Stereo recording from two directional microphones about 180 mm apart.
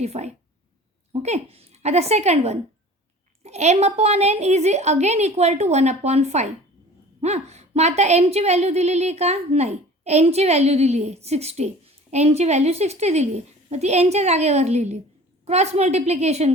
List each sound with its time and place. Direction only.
0.0 s a woman's voice: 35° right (ahead or behind)